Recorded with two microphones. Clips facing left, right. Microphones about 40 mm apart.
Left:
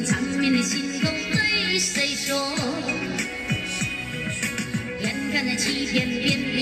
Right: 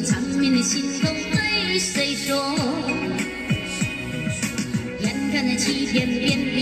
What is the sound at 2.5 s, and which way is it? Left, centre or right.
Music, left.